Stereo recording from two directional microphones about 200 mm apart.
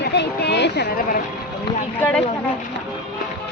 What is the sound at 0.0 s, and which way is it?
Speech, 55° left (ahead or behind).